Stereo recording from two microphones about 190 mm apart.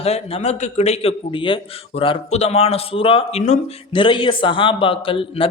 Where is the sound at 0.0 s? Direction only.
30° left (ahead or behind).